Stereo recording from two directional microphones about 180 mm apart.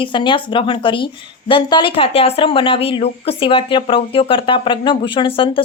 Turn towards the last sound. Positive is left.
turn(degrees=30)  # may be behind; listen again after turning